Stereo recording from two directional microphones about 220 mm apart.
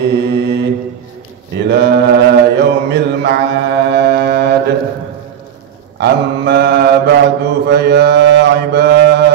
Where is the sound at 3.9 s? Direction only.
45° right (ahead or behind).